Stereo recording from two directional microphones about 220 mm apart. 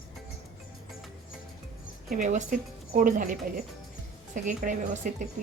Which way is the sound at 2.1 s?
35° right (ahead or behind).